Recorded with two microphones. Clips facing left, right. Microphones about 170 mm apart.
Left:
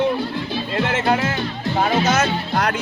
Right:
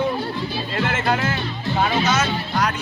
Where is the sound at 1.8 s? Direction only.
40° left (ahead or behind).